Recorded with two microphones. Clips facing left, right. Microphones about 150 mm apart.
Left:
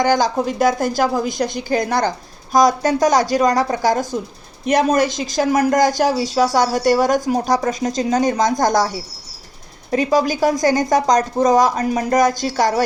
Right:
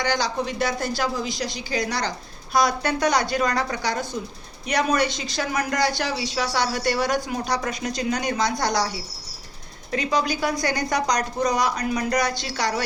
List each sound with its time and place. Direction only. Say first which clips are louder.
0.0 s a woman's voice: left 8 dB; 45° left (ahead or behind)
9.9 s a woman's voice: left 7 dB; 45° left (ahead or behind)